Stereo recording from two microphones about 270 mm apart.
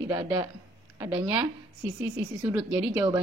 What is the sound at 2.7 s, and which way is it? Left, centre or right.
Speech, centre.